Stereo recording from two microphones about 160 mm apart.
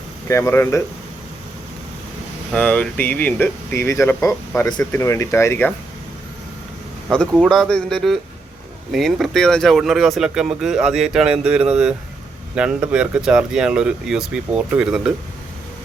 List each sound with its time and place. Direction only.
0.3 s speech: 15° left (ahead or behind)
2.5 s speech: 10° left (ahead or behind)
7.1 s speech: 5° left (ahead or behind)